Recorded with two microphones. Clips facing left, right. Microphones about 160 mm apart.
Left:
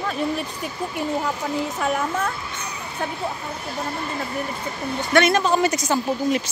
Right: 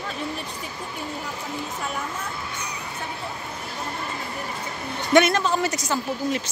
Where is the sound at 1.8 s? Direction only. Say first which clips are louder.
Left 8 dB; 90° left.